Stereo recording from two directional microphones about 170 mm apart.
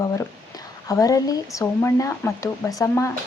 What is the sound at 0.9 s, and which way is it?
Speech, 20° left (ahead or behind).